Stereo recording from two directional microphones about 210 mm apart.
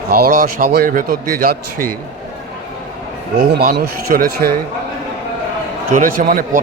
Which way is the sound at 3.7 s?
45° right (ahead or behind).